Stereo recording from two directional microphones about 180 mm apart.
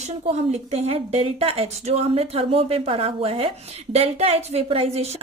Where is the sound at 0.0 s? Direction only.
35° right (ahead or behind).